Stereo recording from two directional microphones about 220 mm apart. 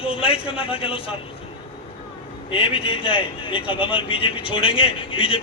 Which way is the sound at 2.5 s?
25° left (ahead or behind).